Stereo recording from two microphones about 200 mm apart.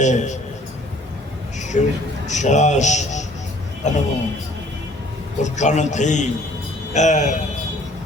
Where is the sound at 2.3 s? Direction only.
35° left (ahead or behind).